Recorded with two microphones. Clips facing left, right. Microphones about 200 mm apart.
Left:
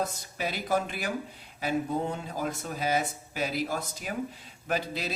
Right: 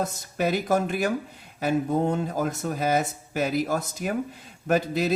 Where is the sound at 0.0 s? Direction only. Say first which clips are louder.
Right 6 dB; 50° right (ahead or behind).